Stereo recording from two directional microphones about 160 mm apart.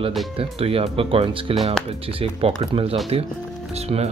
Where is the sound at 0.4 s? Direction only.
35° right (ahead or behind).